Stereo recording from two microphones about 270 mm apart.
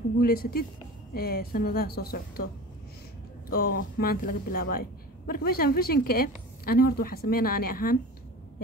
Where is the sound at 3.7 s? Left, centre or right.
Left.